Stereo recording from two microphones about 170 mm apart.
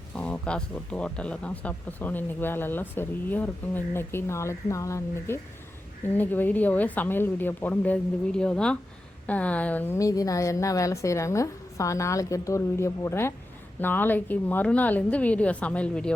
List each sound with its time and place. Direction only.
0.2 s speech: 5° left (ahead or behind)